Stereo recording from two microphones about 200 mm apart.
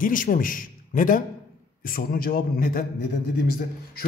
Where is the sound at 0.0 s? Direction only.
40° left (ahead or behind).